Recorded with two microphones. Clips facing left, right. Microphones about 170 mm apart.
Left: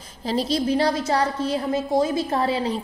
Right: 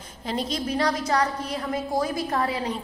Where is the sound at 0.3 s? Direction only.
30° left (ahead or behind).